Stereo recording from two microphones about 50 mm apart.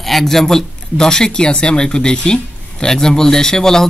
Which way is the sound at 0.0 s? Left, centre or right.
Centre.